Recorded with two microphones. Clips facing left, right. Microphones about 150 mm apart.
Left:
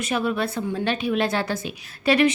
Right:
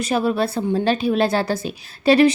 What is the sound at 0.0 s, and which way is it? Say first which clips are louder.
A woman's voice: right 4 dB; 35° right (ahead or behind).